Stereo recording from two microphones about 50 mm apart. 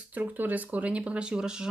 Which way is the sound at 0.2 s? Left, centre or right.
Right.